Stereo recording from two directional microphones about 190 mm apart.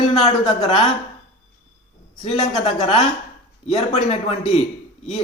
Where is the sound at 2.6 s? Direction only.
25° left (ahead or behind).